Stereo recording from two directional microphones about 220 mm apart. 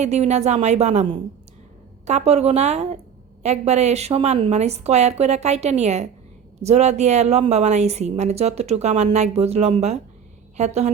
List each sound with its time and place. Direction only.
0.0 s a woman's voice: 30° right (ahead or behind)